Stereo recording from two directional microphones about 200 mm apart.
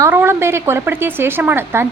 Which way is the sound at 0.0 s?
10° right (ahead or behind).